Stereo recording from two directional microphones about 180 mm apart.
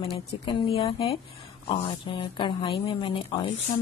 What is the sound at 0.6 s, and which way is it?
A woman's voice, 30° left (ahead or behind).